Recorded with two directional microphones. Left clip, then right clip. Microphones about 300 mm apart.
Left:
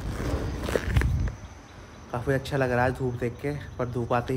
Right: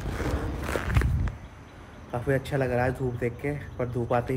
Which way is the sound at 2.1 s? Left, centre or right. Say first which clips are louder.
Even; centre.